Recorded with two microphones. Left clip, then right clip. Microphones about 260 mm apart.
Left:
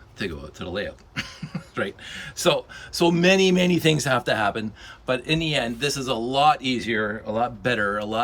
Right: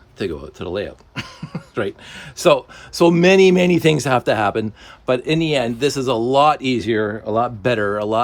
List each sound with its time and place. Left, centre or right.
0.2 s speech: centre